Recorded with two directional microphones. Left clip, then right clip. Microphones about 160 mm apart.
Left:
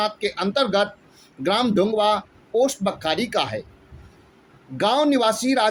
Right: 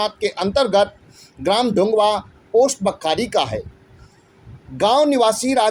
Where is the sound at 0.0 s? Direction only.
40° right (ahead or behind).